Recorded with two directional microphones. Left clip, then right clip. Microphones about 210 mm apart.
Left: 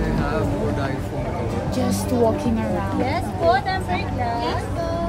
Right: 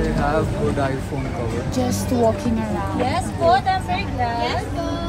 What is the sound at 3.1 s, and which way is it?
Speech, 55° right (ahead or behind).